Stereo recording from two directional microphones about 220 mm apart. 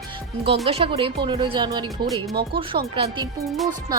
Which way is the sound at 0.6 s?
25° right (ahead or behind).